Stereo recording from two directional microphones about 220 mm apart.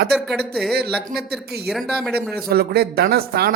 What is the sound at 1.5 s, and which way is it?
Speech, centre (ahead or behind).